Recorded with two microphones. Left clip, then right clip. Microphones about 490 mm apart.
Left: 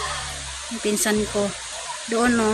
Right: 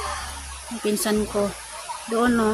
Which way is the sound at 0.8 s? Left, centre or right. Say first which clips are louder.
Left 1 dB; right.